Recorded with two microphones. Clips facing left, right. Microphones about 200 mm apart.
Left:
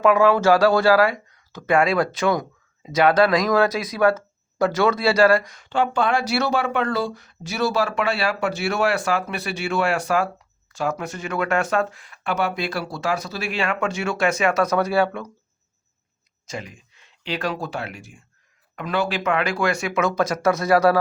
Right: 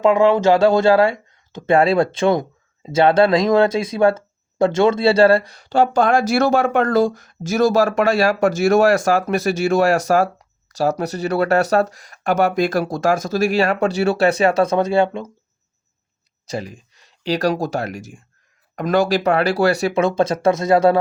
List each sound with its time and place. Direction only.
0.0 s speech: 20° right (ahead or behind)
16.5 s speech: 35° right (ahead or behind)